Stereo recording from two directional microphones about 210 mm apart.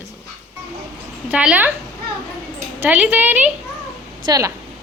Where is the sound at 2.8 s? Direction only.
5° right (ahead or behind).